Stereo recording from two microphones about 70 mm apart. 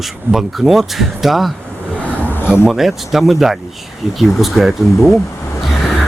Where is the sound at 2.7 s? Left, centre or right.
Centre.